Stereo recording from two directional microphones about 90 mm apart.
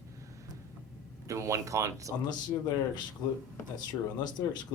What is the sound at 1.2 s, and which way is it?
Speech, 35° right (ahead or behind).